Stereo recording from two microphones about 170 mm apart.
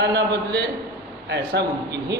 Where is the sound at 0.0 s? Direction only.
70° right (ahead or behind).